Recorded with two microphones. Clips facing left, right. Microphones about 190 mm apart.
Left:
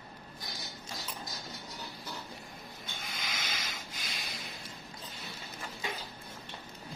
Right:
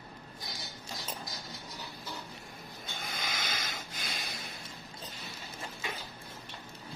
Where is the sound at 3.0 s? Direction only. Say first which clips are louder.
Right 3 dB; 50° right (ahead or behind).